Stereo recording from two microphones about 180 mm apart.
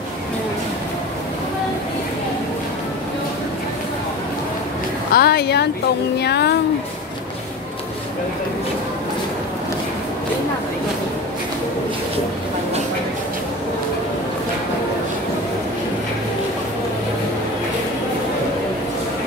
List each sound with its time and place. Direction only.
5.1 s a woman's voice: 60° left (ahead or behind)